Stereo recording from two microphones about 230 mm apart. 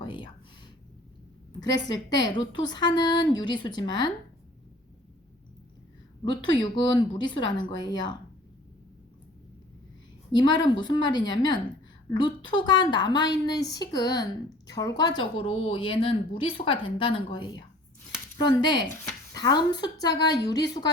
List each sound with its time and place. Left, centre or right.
0.0 s a sound: left
1.6 s a woman's voice: centre
6.2 s a woman's voice: centre
10.3 s a woman's voice: centre